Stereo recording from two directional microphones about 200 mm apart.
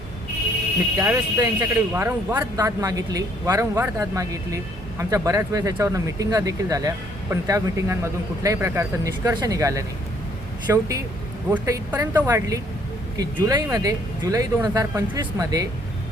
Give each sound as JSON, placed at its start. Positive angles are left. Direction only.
{"t": 0.9, "sound": "a man's voice", "side_deg": -15}